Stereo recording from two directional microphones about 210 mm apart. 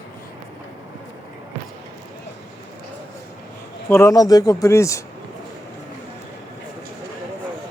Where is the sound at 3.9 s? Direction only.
15° left (ahead or behind).